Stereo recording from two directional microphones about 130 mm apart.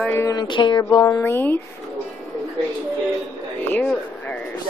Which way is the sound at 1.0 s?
20° left (ahead or behind).